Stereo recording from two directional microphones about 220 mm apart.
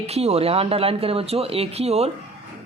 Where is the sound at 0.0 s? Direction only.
30° right (ahead or behind).